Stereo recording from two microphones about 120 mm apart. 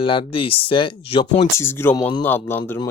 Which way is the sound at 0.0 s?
45° left (ahead or behind).